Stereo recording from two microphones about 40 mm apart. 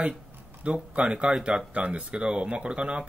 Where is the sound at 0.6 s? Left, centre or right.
Right.